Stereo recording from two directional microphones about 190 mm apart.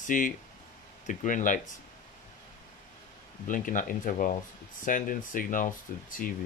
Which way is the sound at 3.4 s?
45° left (ahead or behind).